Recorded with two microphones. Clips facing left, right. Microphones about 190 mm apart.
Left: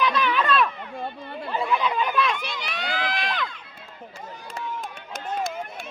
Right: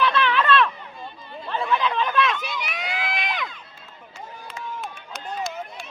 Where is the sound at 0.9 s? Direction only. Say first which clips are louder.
Left 5 dB; 60° left (ahead or behind).